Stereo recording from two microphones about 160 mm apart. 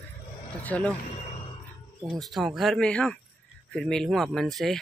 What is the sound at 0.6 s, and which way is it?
Speech, 10° left (ahead or behind).